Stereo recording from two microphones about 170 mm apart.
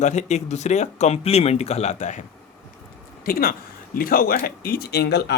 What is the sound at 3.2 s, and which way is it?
Speech, 60° left (ahead or behind).